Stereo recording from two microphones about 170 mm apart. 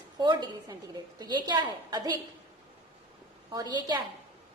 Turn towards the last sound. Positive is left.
turn(degrees=-25)  # may be behind; listen again after turning